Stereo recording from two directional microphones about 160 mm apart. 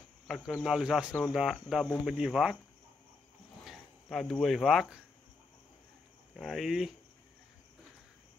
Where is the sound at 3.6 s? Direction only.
Centre (ahead or behind).